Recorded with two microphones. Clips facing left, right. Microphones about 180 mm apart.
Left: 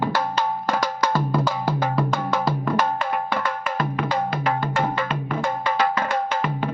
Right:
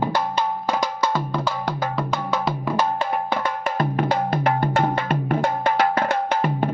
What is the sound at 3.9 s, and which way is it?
Music, 45° right (ahead or behind).